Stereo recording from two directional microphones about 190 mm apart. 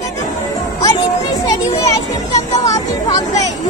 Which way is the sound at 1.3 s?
20° left (ahead or behind).